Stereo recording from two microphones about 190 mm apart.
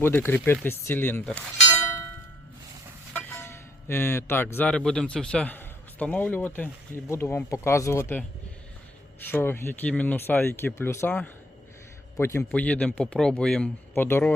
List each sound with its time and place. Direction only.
0.0 s speech: 10° left (ahead or behind)
3.1 s speech: 10° left (ahead or behind)
9.3 s a man's voice: 10° left (ahead or behind)